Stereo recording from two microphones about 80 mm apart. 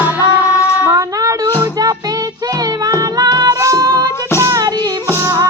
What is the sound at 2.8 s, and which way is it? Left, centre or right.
Music, right.